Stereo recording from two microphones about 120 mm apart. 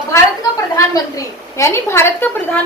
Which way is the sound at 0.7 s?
25° left (ahead or behind).